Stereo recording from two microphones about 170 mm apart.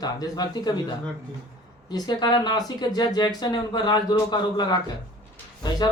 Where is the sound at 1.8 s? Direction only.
25° left (ahead or behind).